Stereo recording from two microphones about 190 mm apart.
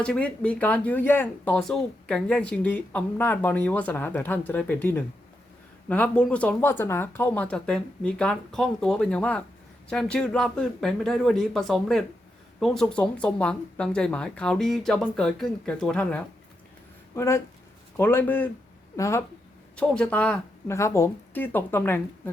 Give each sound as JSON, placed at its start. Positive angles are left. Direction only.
{"t": 0.0, "sound": "speech", "side_deg": 5}
{"t": 19.7, "sound": "speech", "side_deg": 5}